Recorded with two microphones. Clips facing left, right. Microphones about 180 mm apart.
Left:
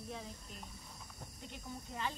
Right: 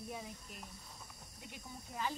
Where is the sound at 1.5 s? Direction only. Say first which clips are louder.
Left 2 dB; 5° right (ahead or behind).